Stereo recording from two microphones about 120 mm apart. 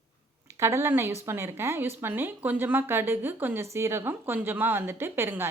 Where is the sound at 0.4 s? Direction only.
25° right (ahead or behind).